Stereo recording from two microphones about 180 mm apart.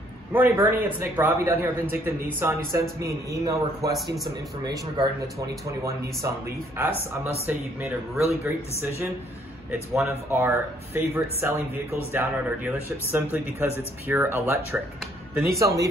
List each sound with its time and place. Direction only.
0.3 s speech: 10° right (ahead or behind)
5.7 s speech: 15° right (ahead or behind)
7.4 s speech: 10° right (ahead or behind)
9.7 s speech: 10° right (ahead or behind)